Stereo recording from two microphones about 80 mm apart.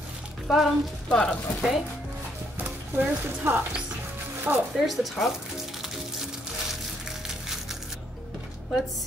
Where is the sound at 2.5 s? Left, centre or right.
Centre.